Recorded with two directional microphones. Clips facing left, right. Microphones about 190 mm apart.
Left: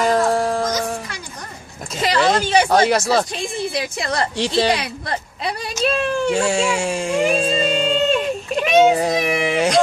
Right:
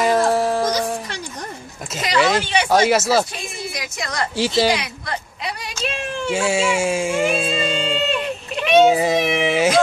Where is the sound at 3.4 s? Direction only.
30° left (ahead or behind).